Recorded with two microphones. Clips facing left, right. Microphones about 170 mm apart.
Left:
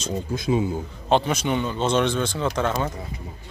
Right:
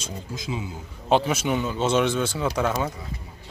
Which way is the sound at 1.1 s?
5° right (ahead or behind).